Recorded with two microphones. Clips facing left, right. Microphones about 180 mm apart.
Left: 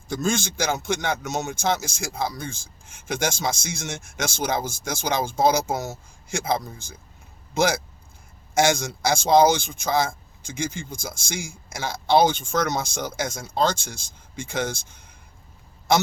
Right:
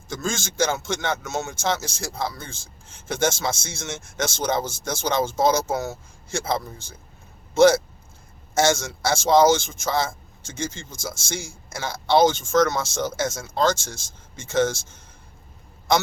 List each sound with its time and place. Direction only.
0.1 s speech: 15° left (ahead or behind)